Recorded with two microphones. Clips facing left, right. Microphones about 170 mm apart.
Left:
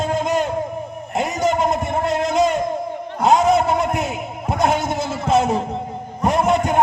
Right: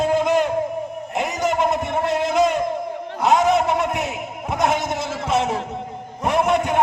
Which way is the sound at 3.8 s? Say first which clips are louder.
Left 2 dB; 35° left (ahead or behind).